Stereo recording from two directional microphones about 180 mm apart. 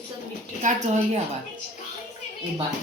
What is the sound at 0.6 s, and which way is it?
Speech, 40° right (ahead or behind).